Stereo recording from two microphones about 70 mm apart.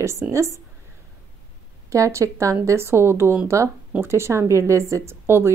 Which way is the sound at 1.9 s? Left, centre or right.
Right.